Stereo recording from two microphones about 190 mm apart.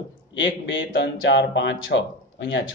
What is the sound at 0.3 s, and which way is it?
A man's voice, 80° left.